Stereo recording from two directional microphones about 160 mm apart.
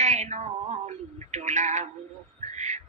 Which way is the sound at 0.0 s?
45° right (ahead or behind).